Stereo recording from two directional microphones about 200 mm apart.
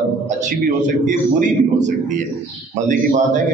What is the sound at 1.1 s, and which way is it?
Speech, 35° right (ahead or behind).